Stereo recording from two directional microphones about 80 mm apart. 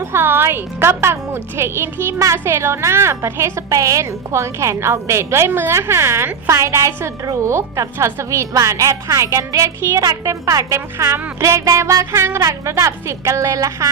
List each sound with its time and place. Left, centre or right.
0.0 s a woman's voice: right
2.1 s a woman's voice: right